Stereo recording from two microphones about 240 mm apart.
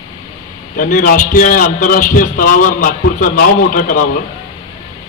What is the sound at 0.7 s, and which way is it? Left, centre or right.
A man's voice, left.